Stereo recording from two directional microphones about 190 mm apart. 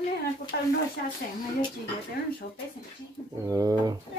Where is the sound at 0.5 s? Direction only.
55° left (ahead or behind).